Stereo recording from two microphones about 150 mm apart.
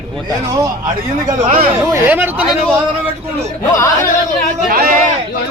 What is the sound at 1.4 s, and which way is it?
Speech, 65° right (ahead or behind).